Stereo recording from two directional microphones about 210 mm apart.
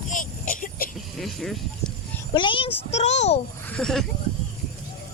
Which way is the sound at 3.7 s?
5° left (ahead or behind).